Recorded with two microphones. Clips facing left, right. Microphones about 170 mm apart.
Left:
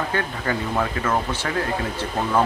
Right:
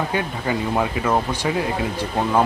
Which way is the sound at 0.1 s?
15° right (ahead or behind).